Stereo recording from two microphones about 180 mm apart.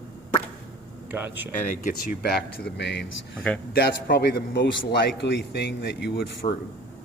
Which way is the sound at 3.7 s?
65° left (ahead or behind).